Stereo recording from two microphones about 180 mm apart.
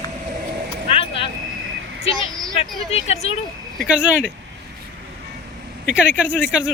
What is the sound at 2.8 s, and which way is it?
Speech, 35° left (ahead or behind).